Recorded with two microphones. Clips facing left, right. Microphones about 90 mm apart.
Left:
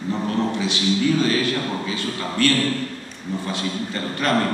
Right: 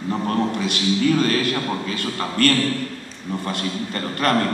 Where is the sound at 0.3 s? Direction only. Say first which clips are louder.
Right 1 dB; 50° right (ahead or behind).